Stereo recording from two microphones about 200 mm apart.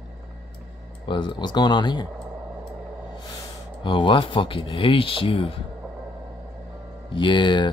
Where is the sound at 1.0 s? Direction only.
25° left (ahead or behind).